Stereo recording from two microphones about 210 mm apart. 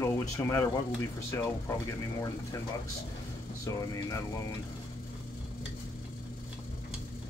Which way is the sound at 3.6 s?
15° left (ahead or behind).